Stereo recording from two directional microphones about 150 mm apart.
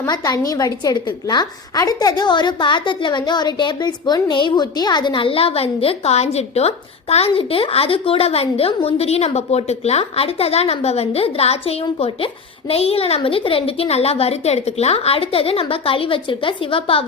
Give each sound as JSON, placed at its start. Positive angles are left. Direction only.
{"t": 0.1, "sound": "a woman's voice", "side_deg": 25}